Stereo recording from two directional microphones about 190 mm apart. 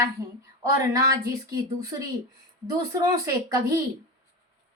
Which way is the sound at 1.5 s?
20° right (ahead or behind).